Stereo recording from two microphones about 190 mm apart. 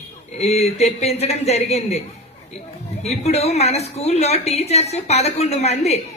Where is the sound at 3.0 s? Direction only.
35° left (ahead or behind).